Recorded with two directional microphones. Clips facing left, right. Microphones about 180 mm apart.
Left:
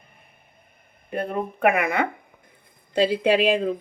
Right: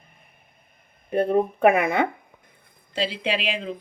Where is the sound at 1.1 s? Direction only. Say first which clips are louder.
Right 6 dB; 30° right (ahead or behind).